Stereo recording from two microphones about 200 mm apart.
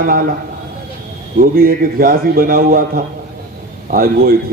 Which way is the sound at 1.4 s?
45° right (ahead or behind).